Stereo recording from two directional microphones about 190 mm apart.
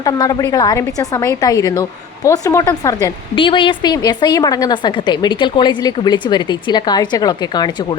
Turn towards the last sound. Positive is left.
turn(degrees=20)  # may be behind; listen again after turning